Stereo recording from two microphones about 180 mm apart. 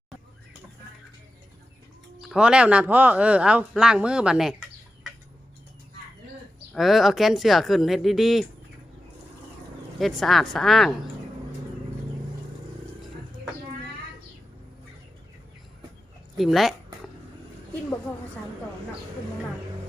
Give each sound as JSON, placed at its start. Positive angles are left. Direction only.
{"t": 2.3, "sound": "speech", "side_deg": -5}
{"t": 6.7, "sound": "speech", "side_deg": 0}
{"t": 10.0, "sound": "speech", "side_deg": 0}
{"t": 16.4, "sound": "speech", "side_deg": 0}